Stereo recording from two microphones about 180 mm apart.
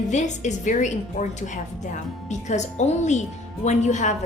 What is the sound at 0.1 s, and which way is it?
A woman's voice, 40° left (ahead or behind).